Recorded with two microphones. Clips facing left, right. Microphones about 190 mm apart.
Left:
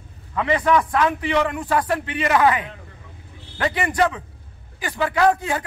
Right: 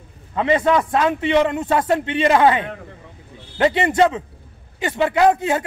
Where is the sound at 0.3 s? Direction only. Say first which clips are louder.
Right 2 dB; 25° right (ahead or behind).